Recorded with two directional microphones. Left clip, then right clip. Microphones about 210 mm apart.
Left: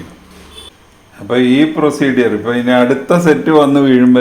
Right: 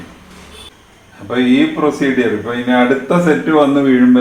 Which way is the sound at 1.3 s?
50° left (ahead or behind).